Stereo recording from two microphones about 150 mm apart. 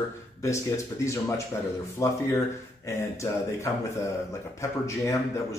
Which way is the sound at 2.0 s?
20° left (ahead or behind).